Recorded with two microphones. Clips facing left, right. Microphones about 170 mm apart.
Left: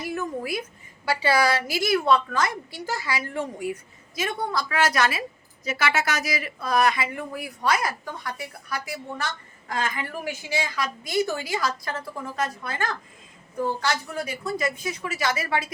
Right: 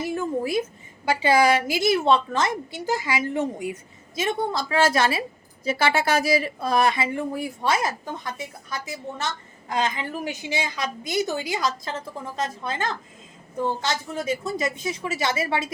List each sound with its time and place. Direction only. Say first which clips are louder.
0.0 s a woman's voice: right 4 dB; 25° right (ahead or behind)